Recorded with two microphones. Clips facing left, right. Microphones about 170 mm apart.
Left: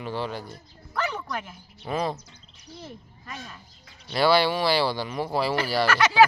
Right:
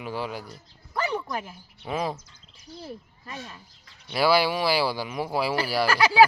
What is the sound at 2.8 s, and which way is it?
Speech, 30° right (ahead or behind).